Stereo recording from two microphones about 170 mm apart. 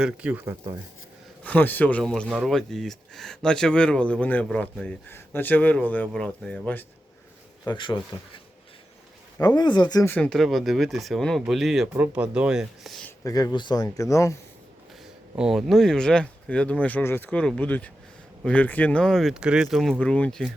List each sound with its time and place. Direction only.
0.0 s speech: 10° right (ahead or behind)
1.5 s speech: 10° left (ahead or behind)
7.7 s speech: 30° left (ahead or behind)
9.6 s speech: 25° left (ahead or behind)
10.1 s speech: 5° left (ahead or behind)
13.1 s speech: 20° left (ahead or behind)
15.4 s speech: 5° right (ahead or behind)